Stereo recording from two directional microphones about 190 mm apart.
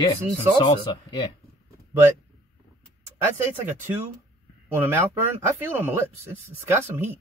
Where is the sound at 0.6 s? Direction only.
25° left (ahead or behind).